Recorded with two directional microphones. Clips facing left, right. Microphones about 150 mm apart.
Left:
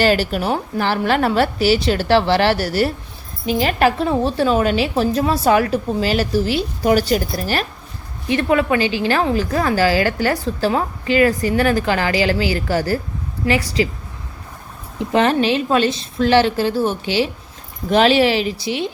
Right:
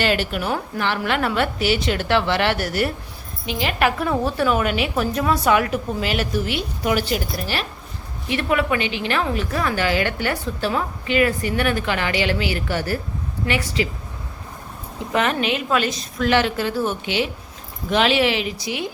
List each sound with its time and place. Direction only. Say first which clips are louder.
0.0 s a woman's voice: left 5 dB; 35° left (ahead or behind)
8.3 s a woman's voice: left 4 dB; 30° left (ahead or behind)
14.9 s a woman's voice: left 5 dB; 30° left (ahead or behind)